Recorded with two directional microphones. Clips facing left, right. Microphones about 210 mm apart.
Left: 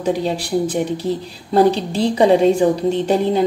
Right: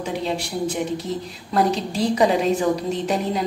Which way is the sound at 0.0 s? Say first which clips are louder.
Left 6 dB; 35° left (ahead or behind).